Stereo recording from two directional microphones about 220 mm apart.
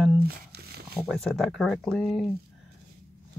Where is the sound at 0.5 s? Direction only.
45° right (ahead or behind).